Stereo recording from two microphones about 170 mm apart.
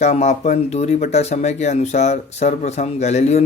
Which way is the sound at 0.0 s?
40° left (ahead or behind).